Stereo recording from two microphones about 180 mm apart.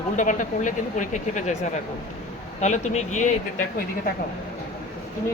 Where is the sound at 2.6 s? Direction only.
40° left (ahead or behind).